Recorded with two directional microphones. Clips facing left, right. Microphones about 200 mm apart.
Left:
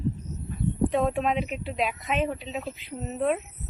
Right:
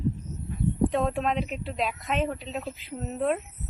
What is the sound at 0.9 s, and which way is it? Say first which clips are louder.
Speech: left 2 dB; centre (ahead or behind).